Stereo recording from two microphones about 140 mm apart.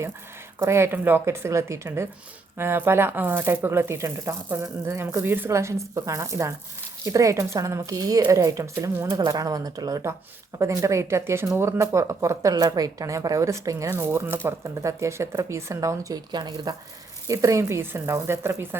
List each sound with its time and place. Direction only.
0.6 s speech: 20° right (ahead or behind)